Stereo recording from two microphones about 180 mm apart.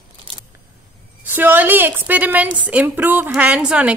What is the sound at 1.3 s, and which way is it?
A woman's voice, 10° right (ahead or behind).